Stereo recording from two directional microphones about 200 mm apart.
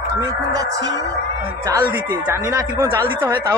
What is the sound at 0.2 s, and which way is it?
Speech, 15° right (ahead or behind).